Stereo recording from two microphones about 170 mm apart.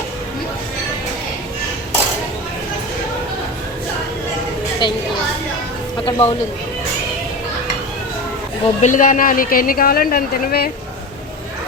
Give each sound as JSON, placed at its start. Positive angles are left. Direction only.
{"t": 4.8, "sound": "a woman's voice", "side_deg": 25}
{"t": 6.1, "sound": "speech", "side_deg": 35}
{"t": 8.8, "sound": "speech", "side_deg": 50}